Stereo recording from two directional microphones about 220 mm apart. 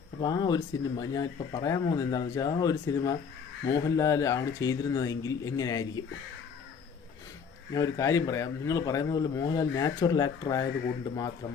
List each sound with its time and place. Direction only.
0.2 s speech: 20° left (ahead or behind)
7.7 s speech: 15° left (ahead or behind)